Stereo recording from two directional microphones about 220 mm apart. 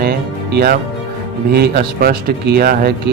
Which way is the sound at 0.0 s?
45° right (ahead or behind).